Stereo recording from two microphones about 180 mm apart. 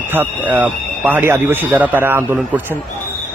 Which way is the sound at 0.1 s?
10° right (ahead or behind).